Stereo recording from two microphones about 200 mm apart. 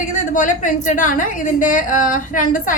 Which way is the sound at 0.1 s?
40° left (ahead or behind).